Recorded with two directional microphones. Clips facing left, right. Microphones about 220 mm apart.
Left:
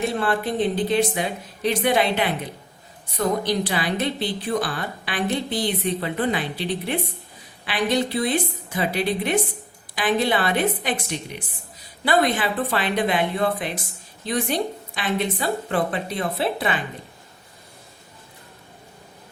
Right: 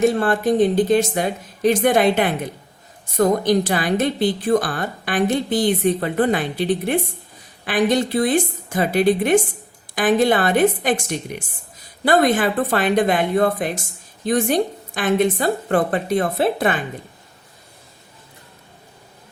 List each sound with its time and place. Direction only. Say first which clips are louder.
0.0 s a woman's voice: right 6 dB; 45° right (ahead or behind)